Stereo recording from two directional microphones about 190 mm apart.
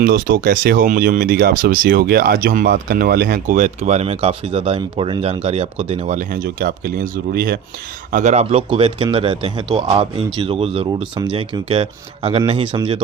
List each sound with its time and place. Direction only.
0.0 s speech: 50° right (ahead or behind)
8.1 s speech: 40° right (ahead or behind)